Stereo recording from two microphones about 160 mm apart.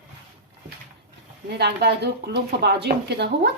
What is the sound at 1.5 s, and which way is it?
Speech, 90° right.